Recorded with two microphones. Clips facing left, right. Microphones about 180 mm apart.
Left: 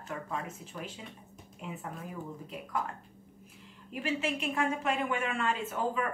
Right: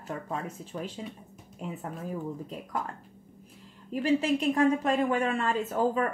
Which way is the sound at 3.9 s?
35° right (ahead or behind).